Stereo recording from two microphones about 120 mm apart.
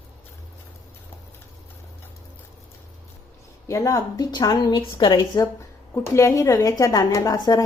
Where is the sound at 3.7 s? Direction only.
25° left (ahead or behind).